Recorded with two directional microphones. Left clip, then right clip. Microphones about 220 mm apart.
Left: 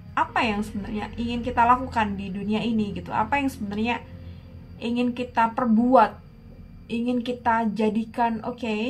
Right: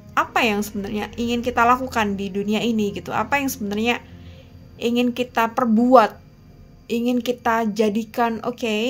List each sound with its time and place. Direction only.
0.1 s a woman's voice: 50° right (ahead or behind)